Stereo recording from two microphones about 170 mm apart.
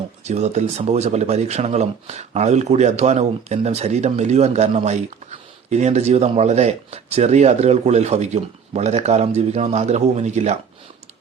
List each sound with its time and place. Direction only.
0.3 s speech: 40° right (ahead or behind)